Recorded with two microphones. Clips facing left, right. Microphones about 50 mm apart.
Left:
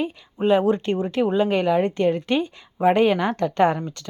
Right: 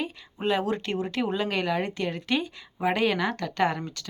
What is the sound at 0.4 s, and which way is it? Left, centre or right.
A woman's voice, left.